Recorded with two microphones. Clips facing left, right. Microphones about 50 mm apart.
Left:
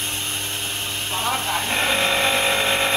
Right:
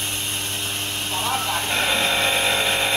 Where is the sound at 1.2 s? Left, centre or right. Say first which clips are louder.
Left 1 dB; centre.